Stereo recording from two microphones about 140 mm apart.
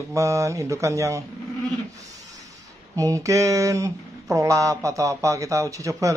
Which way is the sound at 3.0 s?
25° right (ahead or behind).